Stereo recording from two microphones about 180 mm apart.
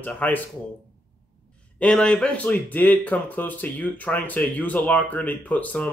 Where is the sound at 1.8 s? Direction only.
5° left (ahead or behind).